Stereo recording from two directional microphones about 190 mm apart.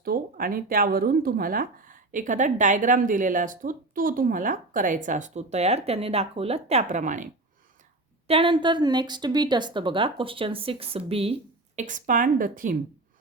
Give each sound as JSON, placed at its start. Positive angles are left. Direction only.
{"t": 0.0, "sound": "speech", "side_deg": -50}
{"t": 8.3, "sound": "a woman's voice", "side_deg": -25}
{"t": 11.8, "sound": "speech", "side_deg": -40}